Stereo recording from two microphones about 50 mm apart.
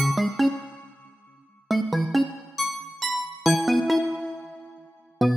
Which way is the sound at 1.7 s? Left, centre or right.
Centre.